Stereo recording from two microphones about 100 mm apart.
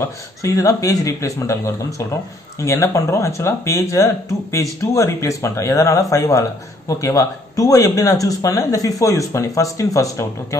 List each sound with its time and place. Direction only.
0.0 s speech: 35° left (ahead or behind)